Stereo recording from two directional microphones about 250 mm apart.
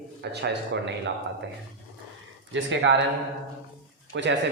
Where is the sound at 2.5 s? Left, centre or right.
Right.